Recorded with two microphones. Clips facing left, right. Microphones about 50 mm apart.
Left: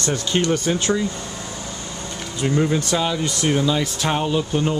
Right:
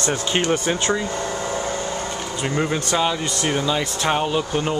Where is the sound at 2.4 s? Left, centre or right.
Right.